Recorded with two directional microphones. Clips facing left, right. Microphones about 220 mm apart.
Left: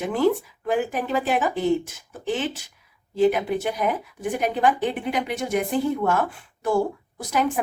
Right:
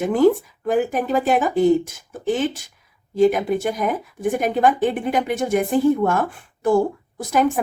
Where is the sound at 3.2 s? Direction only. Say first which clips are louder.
Right 3 dB; 45° right (ahead or behind).